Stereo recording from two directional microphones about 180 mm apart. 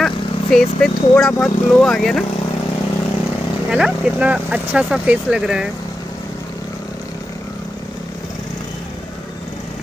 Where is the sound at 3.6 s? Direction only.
5° right (ahead or behind).